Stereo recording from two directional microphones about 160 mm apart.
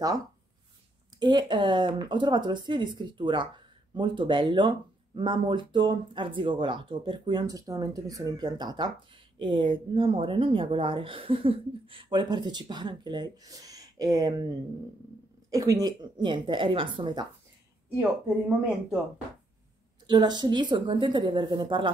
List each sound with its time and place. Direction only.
1.2 s speech: 30° right (ahead or behind)
20.1 s speech: 30° right (ahead or behind)